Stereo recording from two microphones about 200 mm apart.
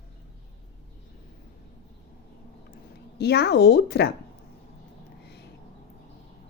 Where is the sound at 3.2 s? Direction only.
55° left (ahead or behind).